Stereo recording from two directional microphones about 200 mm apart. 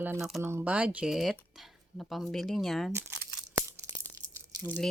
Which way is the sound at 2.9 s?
10° right (ahead or behind).